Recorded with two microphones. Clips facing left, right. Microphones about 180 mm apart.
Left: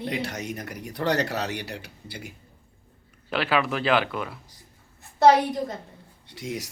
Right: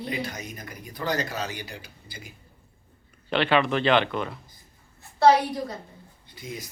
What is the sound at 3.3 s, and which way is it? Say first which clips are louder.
Speech: right 2 dB; 5° left (ahead or behind).